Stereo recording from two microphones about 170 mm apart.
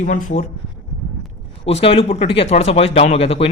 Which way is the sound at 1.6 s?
35° left (ahead or behind).